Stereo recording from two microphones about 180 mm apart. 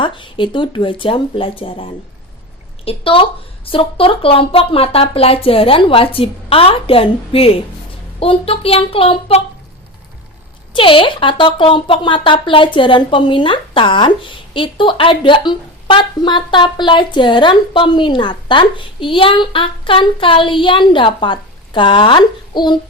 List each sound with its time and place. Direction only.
0.0 s speech: 25° left (ahead or behind)
10.8 s speech: 30° left (ahead or behind)